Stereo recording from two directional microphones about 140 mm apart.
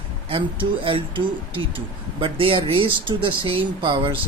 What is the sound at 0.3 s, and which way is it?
Speech, 40° right (ahead or behind).